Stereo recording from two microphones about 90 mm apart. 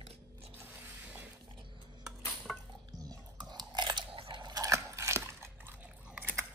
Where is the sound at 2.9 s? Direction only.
45° right (ahead or behind); by 4.4 s 80° right.